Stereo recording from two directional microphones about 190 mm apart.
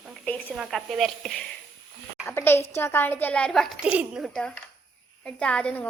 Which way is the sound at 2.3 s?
10° left (ahead or behind).